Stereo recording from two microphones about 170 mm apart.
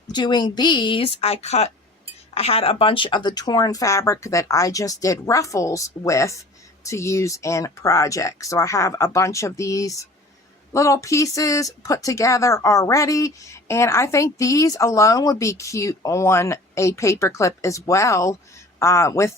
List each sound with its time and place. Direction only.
0.1 s speech: 25° left (ahead or behind)